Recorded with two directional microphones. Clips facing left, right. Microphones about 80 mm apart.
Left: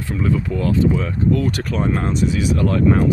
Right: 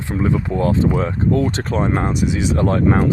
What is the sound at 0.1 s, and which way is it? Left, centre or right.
Speech, right.